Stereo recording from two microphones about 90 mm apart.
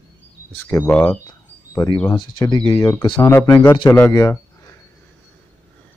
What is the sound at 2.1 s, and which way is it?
Speech, 55° left (ahead or behind).